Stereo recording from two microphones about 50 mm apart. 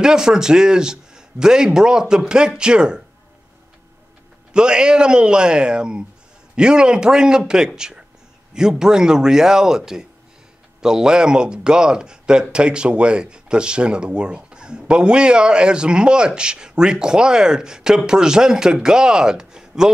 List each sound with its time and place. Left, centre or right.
0.0 s speech: centre
4.6 s speech: centre